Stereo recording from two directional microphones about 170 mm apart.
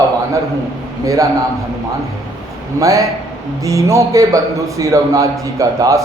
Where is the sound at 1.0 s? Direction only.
20° right (ahead or behind).